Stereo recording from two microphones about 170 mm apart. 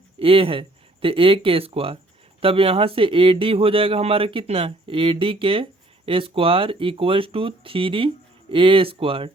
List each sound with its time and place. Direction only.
0.2 s speech: 35° right (ahead or behind)